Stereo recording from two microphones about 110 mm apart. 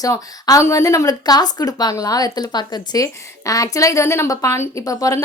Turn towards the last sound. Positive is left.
turn(degrees=30)  # may be behind; listen again after turning